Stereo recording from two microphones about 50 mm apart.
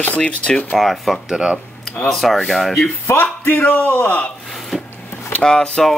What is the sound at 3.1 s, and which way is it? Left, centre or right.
Speech, left.